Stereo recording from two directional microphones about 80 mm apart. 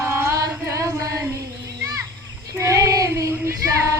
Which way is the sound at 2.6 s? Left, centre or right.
Right.